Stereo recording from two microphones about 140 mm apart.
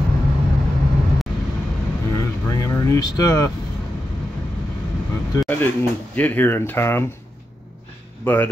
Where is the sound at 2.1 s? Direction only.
25° left (ahead or behind).